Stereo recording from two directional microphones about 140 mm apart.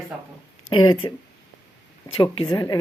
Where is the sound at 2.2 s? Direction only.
30° left (ahead or behind).